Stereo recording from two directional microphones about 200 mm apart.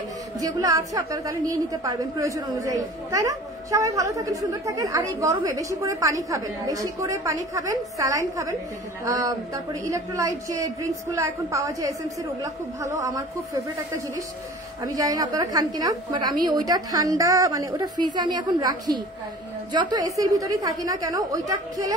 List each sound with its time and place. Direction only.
0.4 s a woman's voice: 20° right (ahead or behind)